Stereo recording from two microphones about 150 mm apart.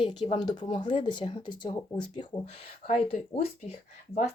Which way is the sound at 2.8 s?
50° left (ahead or behind).